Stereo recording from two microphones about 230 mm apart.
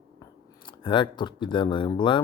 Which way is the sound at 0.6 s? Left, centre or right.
Left.